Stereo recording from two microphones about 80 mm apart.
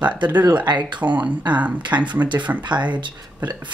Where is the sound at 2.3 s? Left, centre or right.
Right.